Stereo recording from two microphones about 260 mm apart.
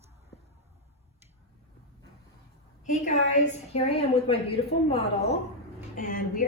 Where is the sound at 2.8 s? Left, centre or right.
Left.